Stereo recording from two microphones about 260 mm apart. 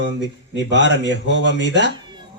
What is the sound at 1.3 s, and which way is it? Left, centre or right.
Speech, left.